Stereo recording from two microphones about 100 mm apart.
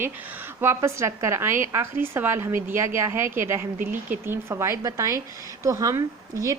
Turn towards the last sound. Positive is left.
turn(degrees=-35)  # may be behind; listen again after turning